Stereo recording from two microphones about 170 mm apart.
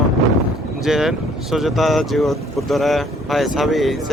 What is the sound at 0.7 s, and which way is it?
Speech, centre (ahead or behind).